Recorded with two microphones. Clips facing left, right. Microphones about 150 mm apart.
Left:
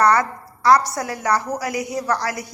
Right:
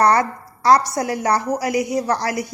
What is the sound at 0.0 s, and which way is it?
A woman's voice, 30° right (ahead or behind).